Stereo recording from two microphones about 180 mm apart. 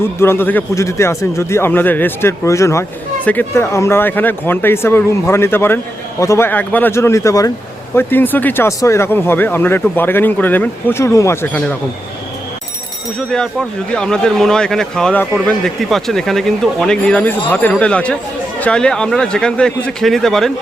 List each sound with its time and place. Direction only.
0.0 s speech: 15° left (ahead or behind)
13.1 s speech: 5° left (ahead or behind)